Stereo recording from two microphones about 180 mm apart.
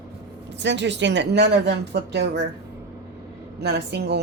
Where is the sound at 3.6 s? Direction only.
65° right (ahead or behind).